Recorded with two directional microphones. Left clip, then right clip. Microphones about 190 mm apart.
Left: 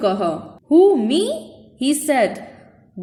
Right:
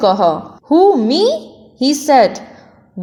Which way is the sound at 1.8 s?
20° right (ahead or behind).